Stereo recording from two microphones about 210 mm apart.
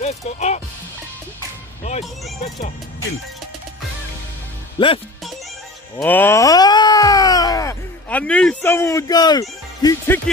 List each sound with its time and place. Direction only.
0.0 s speech: 30° left (ahead or behind)
4.7 s speech: 25° left (ahead or behind)
5.9 s groan: 10° left (ahead or behind)